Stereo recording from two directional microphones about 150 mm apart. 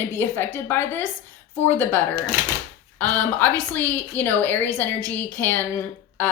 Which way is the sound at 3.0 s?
10° left (ahead or behind).